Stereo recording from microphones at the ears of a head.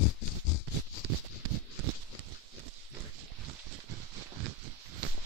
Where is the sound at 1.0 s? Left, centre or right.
Right.